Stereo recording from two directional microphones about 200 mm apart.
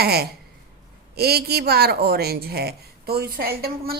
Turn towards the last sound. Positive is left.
turn(degrees=-50)  # may be behind; listen again after turning